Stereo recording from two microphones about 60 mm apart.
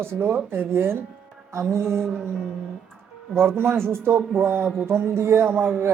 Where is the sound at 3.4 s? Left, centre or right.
Right.